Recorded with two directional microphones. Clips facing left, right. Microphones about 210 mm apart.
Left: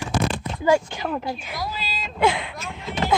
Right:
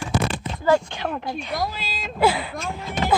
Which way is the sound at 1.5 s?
50° right (ahead or behind).